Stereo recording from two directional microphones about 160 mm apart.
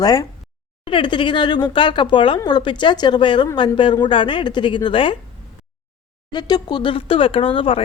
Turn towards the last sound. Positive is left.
turn(degrees=35)  # may be behind; listen again after turning